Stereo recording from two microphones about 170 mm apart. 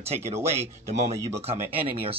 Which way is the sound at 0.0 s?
40° right (ahead or behind).